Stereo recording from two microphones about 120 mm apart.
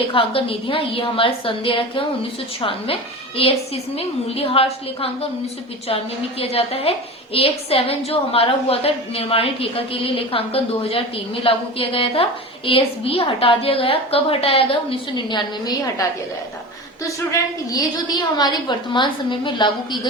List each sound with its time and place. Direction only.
0.1 s a woman's voice: 50° left (ahead or behind)
6.4 s a woman's voice: 55° left (ahead or behind); by 15.7 s 40° left (ahead or behind)
17.3 s a woman's voice: 30° left (ahead or behind)